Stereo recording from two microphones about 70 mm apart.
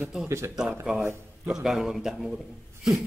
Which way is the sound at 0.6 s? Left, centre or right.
Centre.